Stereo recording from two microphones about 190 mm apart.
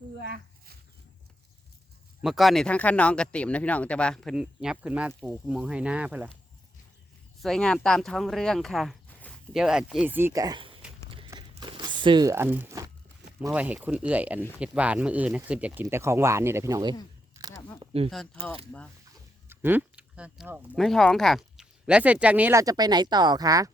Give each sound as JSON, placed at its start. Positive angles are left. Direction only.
{"t": 0.2, "sound": "a sound", "side_deg": -55}
{"t": 2.2, "sound": "speech", "side_deg": 0}
{"t": 7.4, "sound": "speech", "side_deg": 5}
{"t": 17.9, "sound": "speech", "side_deg": -30}
{"t": 19.5, "sound": "speech", "side_deg": -10}